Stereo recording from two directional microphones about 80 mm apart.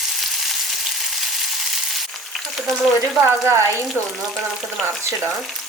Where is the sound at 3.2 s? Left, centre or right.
Right.